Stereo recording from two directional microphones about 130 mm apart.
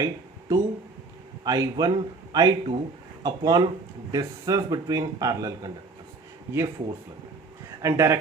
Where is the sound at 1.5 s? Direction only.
30° right (ahead or behind).